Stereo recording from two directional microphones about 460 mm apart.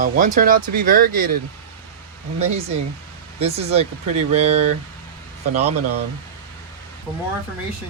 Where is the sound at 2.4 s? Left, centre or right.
Centre.